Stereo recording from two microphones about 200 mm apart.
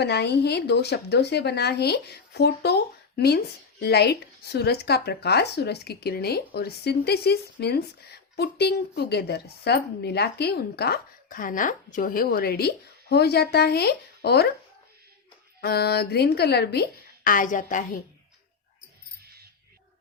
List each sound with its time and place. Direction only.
0.0 s speech: 55° left (ahead or behind)
15.6 s speech: 55° left (ahead or behind)
17.2 s a woman's voice: 40° left (ahead or behind)